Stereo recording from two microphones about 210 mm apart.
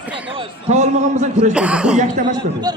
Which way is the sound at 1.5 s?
5° right (ahead or behind).